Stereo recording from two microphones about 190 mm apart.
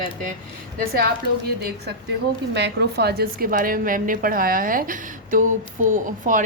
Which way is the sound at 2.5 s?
65° right (ahead or behind).